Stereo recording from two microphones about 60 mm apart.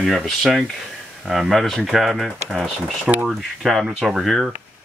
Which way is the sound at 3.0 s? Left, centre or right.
Right.